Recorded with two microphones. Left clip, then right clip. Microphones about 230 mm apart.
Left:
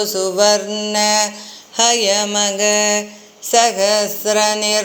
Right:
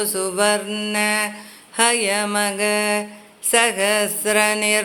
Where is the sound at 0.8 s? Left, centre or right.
Centre.